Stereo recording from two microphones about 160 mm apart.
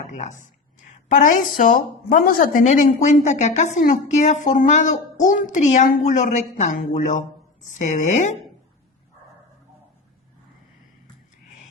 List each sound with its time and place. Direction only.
0.1 s a woman's voice: 50° left (ahead or behind)